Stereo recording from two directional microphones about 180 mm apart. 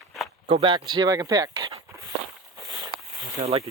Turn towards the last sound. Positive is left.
turn(degrees=-35)  # may be behind; listen again after turning